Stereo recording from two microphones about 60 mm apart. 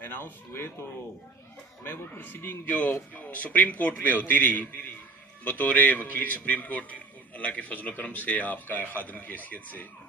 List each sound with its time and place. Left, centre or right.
0.0 s a man's voice: left
1.9 s a man's voice: left